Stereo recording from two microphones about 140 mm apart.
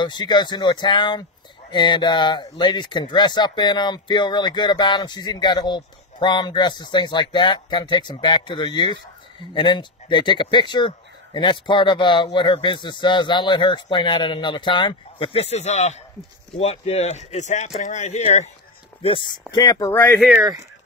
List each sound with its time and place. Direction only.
0.0 s speech: 30° left (ahead or behind); by 18.5 s 55° left (ahead or behind)
19.0 s speech: 35° left (ahead or behind)
19.9 s speech: 15° left (ahead or behind)
20.2 s speech: 5° right (ahead or behind)